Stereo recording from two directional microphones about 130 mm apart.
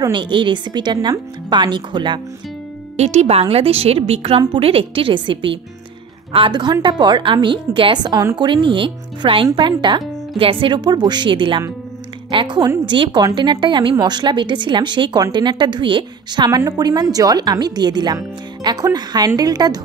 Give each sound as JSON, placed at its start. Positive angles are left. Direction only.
{"t": 0.1, "sound": "a woman's voice", "side_deg": -40}
{"t": 3.0, "sound": "a woman's voice", "side_deg": -55}